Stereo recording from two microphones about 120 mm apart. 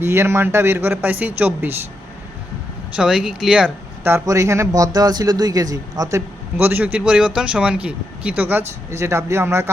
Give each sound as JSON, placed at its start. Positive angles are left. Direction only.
{"t": 0.0, "sound": "a man's voice", "side_deg": -20}
{"t": 2.9, "sound": "speech", "side_deg": -5}
{"t": 4.0, "sound": "a man's voice", "side_deg": -20}